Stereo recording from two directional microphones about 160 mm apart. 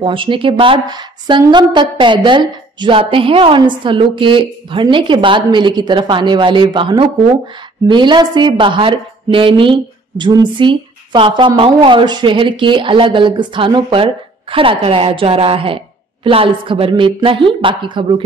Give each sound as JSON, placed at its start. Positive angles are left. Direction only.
{"t": 0.0, "sound": "a woman's voice", "side_deg": -30}